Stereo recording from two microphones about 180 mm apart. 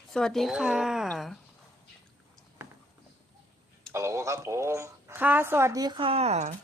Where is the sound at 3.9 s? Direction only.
15° right (ahead or behind).